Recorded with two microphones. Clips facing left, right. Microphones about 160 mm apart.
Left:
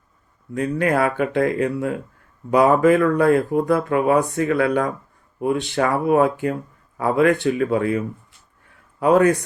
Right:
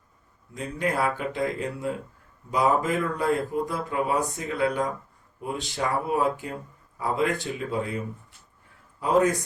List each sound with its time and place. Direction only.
0.5 s a man's voice: 70° left (ahead or behind)